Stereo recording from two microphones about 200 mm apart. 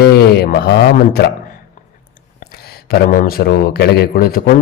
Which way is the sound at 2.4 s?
50° left (ahead or behind).